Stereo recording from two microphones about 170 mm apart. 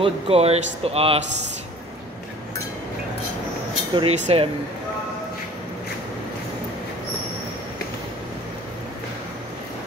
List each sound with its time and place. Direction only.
0.0 s speech: 35° right (ahead or behind)
3.9 s speech: 35° right (ahead or behind)